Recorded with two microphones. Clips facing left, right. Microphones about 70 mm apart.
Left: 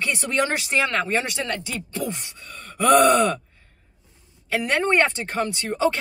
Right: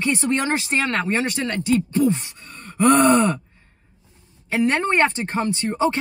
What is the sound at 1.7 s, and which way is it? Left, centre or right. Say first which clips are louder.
Groan: right 11 dB; right.